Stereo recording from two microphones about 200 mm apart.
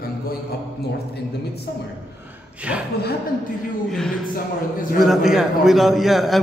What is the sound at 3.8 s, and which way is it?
A man's voice, centre (ahead or behind).